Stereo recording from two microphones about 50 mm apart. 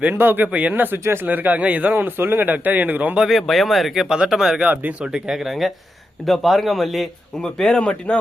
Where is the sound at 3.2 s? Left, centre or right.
Centre.